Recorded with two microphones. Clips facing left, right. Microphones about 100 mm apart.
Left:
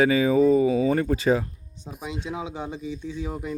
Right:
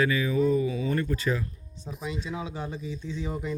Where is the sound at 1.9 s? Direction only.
5° left (ahead or behind).